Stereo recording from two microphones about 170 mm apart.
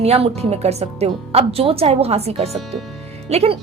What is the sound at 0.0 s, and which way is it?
Speech, 40° right (ahead or behind).